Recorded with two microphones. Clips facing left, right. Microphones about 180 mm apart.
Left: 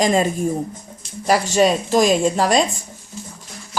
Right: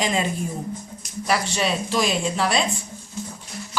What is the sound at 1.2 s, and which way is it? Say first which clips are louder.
Speech: left 8 dB; 40° left (ahead or behind).